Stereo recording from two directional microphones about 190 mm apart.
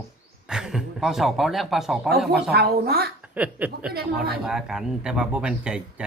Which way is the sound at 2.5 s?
55° right (ahead or behind).